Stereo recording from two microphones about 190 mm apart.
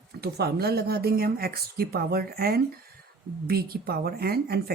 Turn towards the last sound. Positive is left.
turn(degrees=-55)  # may be behind; listen again after turning